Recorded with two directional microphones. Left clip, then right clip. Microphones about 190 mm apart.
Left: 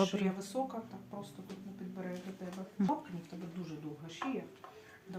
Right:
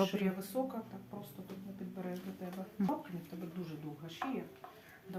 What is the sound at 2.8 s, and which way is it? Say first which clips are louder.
Speech: left 3 dB; 15° left (ahead or behind).